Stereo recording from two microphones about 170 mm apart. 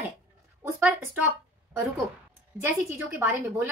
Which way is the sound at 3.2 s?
15° right (ahead or behind).